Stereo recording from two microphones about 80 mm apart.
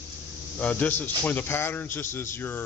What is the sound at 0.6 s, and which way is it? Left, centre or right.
Speech, centre.